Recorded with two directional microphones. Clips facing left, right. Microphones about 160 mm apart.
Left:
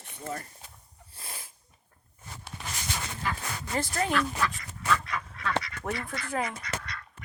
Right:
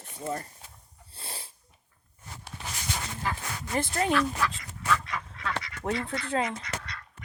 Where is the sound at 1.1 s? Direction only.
30° right (ahead or behind).